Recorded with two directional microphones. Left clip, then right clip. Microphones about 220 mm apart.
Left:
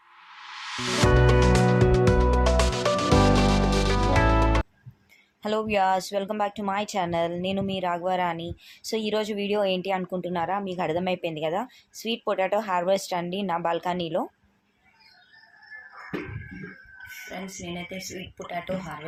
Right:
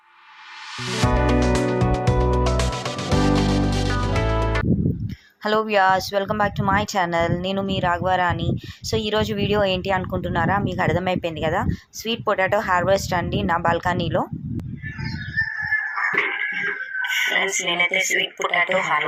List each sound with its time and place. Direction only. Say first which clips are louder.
1.0 s music: right 1 dB; centre (ahead or behind)
5.4 s speech: right 6 dB; 15° right (ahead or behind)
16.0 s a sound: right 16 dB; 40° right (ahead or behind)